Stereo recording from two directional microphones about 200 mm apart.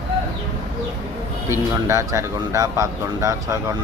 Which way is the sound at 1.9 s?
15° right (ahead or behind).